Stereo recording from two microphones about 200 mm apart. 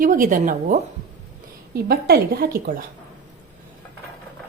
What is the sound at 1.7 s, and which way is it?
Speech, 50° right (ahead or behind).